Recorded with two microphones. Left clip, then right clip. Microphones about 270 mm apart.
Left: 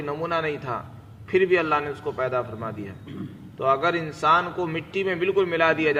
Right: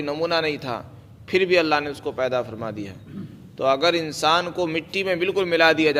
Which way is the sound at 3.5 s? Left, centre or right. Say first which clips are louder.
Right 2 dB; right.